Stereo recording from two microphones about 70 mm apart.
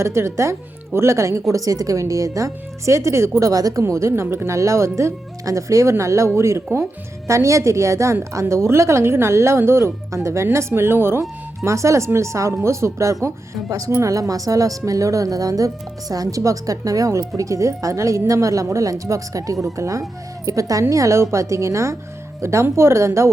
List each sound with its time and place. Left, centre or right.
0.0 s a woman's voice: right
3.5 s speech: right
3.8 s a woman's voice: right
11.2 s a woman's voice: right